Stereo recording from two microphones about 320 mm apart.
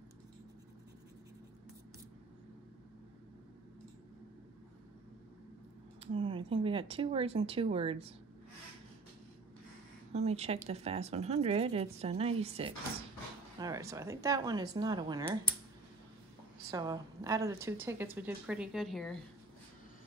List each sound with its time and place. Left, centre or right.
6.1 s a woman's voice: centre
10.1 s a woman's voice: centre
16.7 s a woman's voice: centre